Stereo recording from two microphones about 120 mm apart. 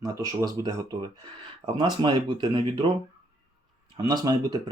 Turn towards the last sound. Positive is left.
turn(degrees=-35)  # may be behind; listen again after turning